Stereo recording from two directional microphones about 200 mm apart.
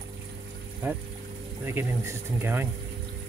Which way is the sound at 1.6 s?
10° right (ahead or behind).